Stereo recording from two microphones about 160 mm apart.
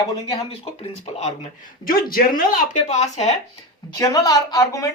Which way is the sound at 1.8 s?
65° left (ahead or behind).